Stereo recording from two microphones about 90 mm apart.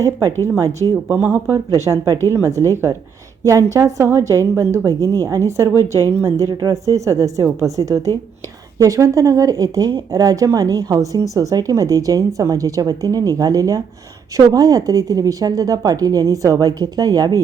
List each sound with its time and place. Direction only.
0.0 s speech: 40° right (ahead or behind)
1.7 s speech: 40° right (ahead or behind)